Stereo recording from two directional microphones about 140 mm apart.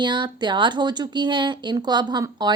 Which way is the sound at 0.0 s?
35° right (ahead or behind).